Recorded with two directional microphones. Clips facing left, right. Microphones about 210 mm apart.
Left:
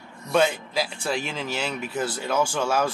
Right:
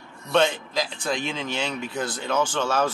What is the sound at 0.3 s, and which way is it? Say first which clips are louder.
Speech: even; 10° left (ahead or behind).